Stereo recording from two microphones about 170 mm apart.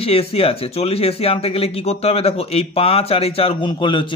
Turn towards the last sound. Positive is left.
turn(degrees=30)  # may be behind; listen again after turning